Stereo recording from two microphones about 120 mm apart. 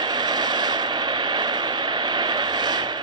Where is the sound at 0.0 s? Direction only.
35° right (ahead or behind).